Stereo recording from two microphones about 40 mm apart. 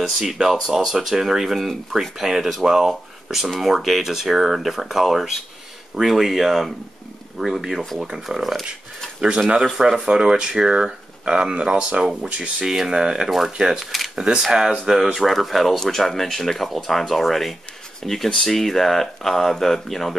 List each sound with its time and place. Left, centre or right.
0.0 s speech: centre
9.8 s speech: centre
12.0 s speech: centre
12.3 s speech: right
12.6 s speech: centre
13.7 s speech: centre
14.1 s speech: right
15.1 s speech: centre